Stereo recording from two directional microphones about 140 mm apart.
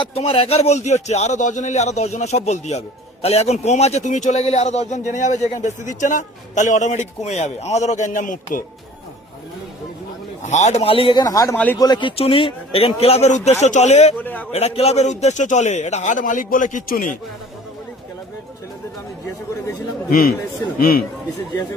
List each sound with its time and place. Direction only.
0.0 s a man's voice: 45° left (ahead or behind); by 8.4 s 65° left (ahead or behind)
10.4 s a man's voice: 55° left (ahead or behind); by 11.5 s 25° left (ahead or behind)
11.5 s speech: 10° left (ahead or behind)
11.8 s speech: 35° left (ahead or behind); by 14.2 s 55° left (ahead or behind)
14.2 s speech: 15° left (ahead or behind)
14.5 s a man's voice: 50° left (ahead or behind); by 17.2 s 70° left (ahead or behind)
20.1 s a man's voice: 90° left